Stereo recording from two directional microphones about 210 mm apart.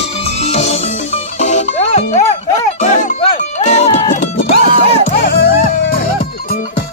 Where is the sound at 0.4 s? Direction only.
30° left (ahead or behind).